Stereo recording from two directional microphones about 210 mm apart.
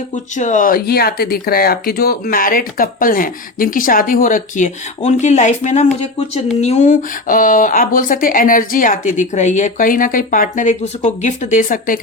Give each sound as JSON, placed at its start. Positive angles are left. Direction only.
{"t": 0.3, "sound": "speech", "side_deg": 35}